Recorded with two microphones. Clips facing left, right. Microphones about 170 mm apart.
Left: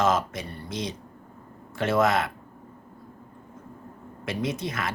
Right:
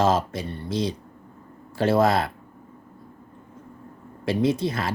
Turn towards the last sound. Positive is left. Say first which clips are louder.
# right 6 dB
turn(degrees=-30)  # may be behind; listen again after turning